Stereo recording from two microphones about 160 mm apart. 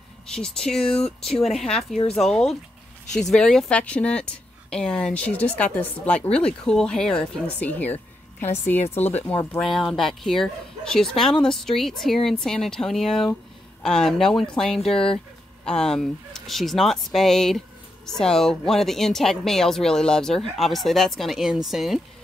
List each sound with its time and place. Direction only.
0.3 s speech: 5° left (ahead or behind)
2.0 s speech: 40° left (ahead or behind)
3.2 s speech: 5° left (ahead or behind)
9.6 s speech: centre (ahead or behind)